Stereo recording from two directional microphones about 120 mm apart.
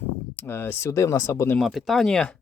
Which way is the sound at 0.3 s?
20° left (ahead or behind).